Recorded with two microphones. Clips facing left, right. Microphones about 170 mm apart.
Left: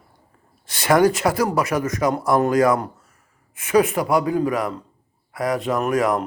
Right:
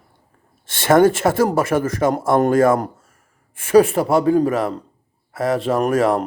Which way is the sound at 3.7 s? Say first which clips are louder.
Right 4 dB; 30° right (ahead or behind).